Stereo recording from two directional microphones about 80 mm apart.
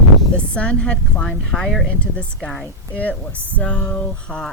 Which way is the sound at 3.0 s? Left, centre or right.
Centre.